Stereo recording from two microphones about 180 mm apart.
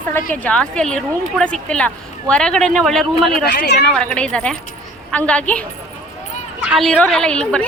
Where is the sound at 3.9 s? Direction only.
5° left (ahead or behind).